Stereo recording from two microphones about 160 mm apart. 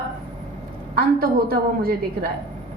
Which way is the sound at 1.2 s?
70° right (ahead or behind).